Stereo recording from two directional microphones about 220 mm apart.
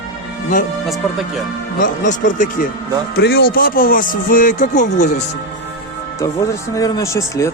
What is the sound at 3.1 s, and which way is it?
Speech, 45° left (ahead or behind).